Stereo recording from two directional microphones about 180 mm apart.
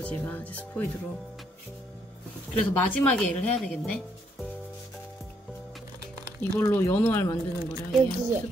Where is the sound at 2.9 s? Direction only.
5° left (ahead or behind).